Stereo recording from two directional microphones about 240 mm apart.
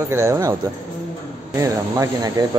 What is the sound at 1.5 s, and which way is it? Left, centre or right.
Speech, centre.